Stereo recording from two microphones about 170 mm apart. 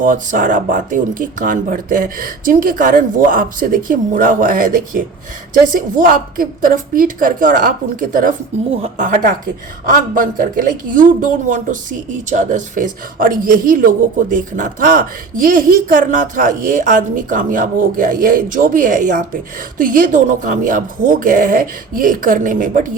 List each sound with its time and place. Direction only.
0.0 s speech: 50° right (ahead or behind)